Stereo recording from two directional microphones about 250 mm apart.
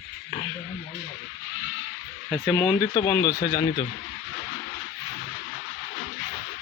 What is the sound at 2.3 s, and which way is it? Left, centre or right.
Speech, centre.